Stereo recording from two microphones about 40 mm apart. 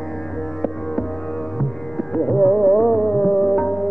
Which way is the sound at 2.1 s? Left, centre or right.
Centre.